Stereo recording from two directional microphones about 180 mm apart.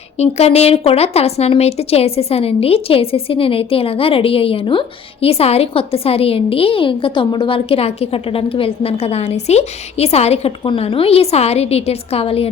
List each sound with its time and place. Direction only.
0.2 s speech: 35° left (ahead or behind)